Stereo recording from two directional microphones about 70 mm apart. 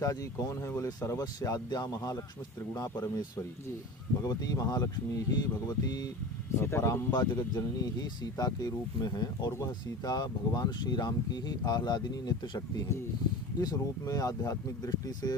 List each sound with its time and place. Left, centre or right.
0.0 s speech: left
6.6 s speech: left
7.1 s speech: left
10.0 s speech: left
13.6 s speech: left